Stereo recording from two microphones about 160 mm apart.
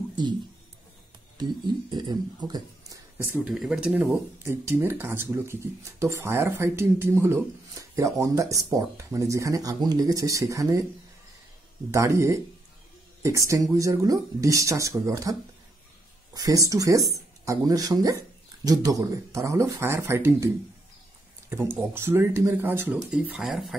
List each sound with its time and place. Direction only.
0.1 s a sound: 30° right (ahead or behind)
1.4 s speech: 25° right (ahead or behind); by 4.2 s 5° right (ahead or behind)
4.4 s speech: 15° right (ahead or behind)
11.9 s speech: 20° right (ahead or behind)
16.3 s speech: 20° right (ahead or behind)
21.7 s speech: 15° right (ahead or behind)